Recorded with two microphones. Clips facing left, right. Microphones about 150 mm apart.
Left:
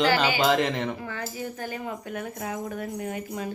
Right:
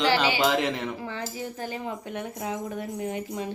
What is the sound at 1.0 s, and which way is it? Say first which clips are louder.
Speech: even; 25° right (ahead or behind).